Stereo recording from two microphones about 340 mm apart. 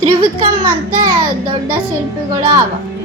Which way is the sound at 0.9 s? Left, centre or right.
Right.